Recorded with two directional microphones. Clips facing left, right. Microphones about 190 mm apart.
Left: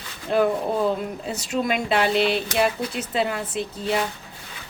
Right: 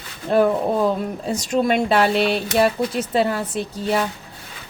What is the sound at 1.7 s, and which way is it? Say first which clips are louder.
Speech: right 4 dB; 35° right (ahead or behind).